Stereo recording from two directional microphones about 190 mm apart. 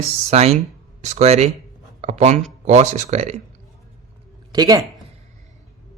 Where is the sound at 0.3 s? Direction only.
35° right (ahead or behind).